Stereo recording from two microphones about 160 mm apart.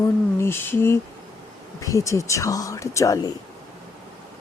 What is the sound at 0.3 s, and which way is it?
A woman's voice, 15° left (ahead or behind).